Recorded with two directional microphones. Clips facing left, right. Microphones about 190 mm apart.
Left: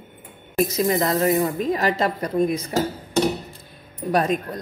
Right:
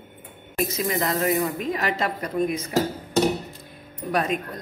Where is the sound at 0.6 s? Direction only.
35° left (ahead or behind).